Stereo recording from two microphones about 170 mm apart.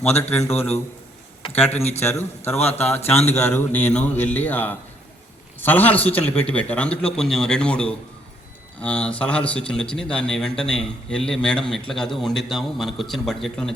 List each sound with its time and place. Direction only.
0.2 s a man's voice: 15° left (ahead or behind)
1.4 s speech: 35° left (ahead or behind)
2.0 s a man's voice: 15° left (ahead or behind)
2.6 s speech: 40° left (ahead or behind)
3.3 s a man's voice: 15° left (ahead or behind)